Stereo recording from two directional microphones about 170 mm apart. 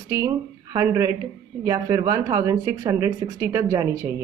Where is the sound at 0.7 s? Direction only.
20° right (ahead or behind).